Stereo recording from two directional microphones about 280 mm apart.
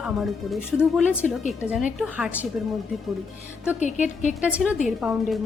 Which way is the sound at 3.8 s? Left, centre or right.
Left.